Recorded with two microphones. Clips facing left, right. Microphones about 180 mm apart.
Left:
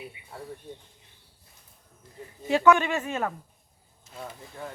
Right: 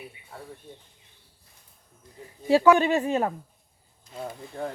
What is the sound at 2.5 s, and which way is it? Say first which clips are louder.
Speech: right 3 dB; 30° right (ahead or behind).